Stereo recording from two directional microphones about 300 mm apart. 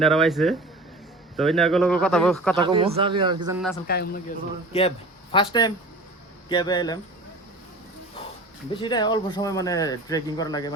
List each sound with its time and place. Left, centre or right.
0.0 s speech: centre
2.6 s a man's voice: centre
3.8 s speech: left
4.7 s speech: centre
8.2 s a sound: centre
8.7 s speech: centre